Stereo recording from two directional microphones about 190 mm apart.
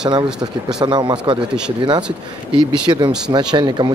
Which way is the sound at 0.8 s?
25° right (ahead or behind).